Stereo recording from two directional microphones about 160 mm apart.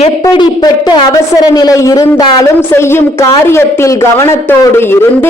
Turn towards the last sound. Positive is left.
turn(degrees=15)  # may be behind; listen again after turning